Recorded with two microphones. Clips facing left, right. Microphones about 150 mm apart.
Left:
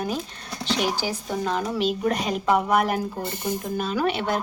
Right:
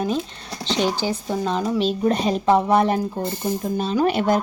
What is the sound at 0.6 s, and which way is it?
Speech, 25° right (ahead or behind).